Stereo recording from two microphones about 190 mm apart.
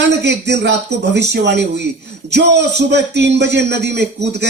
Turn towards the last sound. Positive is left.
turn(degrees=-65)  # may be behind; listen again after turning